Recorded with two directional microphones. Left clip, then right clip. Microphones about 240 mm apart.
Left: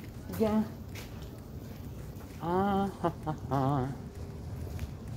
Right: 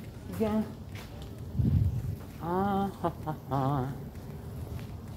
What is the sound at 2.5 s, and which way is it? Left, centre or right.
Speech, centre.